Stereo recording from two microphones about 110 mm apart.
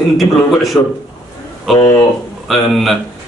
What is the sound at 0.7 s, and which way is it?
Speech, 25° left (ahead or behind).